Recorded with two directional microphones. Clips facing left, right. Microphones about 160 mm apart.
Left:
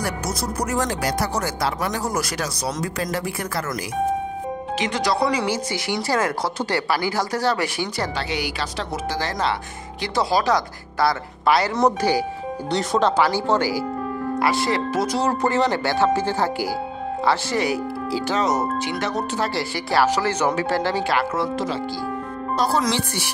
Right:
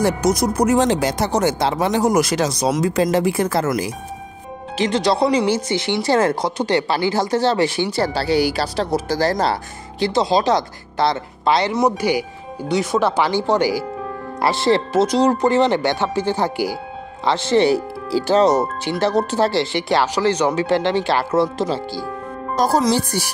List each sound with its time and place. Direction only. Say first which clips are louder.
0.0 s speech: right 9 dB; 20° right (ahead or behind)
11.7 s speech: right 1 dB; 10° right (ahead or behind)
12.6 s speech: right 2 dB; centre (ahead or behind)
13.2 s speech: right 2 dB; 20° right (ahead or behind)
14.4 s speech: right 6 dB; 30° right (ahead or behind)
22.6 s speech: right 5 dB; 45° right (ahead or behind)